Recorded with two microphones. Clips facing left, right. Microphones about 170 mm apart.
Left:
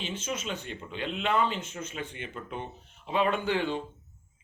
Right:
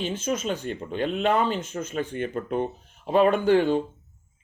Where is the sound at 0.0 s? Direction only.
45° right (ahead or behind).